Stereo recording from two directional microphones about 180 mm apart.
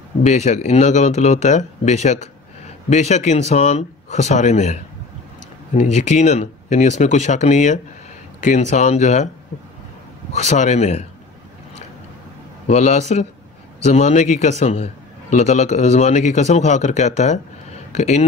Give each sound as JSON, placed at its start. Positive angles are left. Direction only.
{"t": 0.2, "sound": "a man's voice", "side_deg": 40}
{"t": 10.3, "sound": "a man's voice", "side_deg": 40}
{"t": 12.6, "sound": "a man's voice", "side_deg": 40}